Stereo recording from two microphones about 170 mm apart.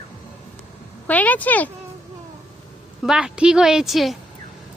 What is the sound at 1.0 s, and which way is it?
Speech, 10° left (ahead or behind).